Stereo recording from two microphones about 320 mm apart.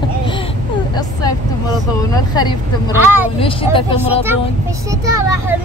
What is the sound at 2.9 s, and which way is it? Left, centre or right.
Speech, centre.